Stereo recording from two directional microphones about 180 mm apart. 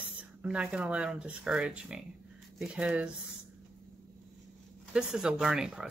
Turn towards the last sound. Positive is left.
turn(degrees=-5)  # may be behind; listen again after turning